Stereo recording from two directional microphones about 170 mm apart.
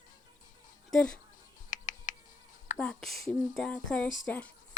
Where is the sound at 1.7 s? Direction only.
50° left (ahead or behind).